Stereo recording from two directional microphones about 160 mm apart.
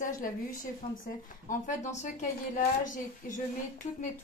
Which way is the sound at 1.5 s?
50° left (ahead or behind).